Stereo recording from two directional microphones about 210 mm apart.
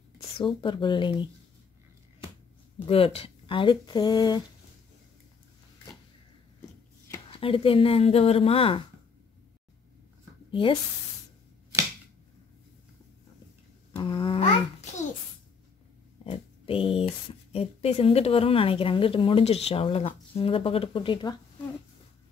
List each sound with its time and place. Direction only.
0.6 s speech: 20° left (ahead or behind)
2.8 s speech: 25° left (ahead or behind)
7.2 s speech: 25° left (ahead or behind)
10.5 s speech: 25° left (ahead or behind)
13.9 s babbling: 25° left (ahead or behind)
16.3 s speech: 25° left (ahead or behind)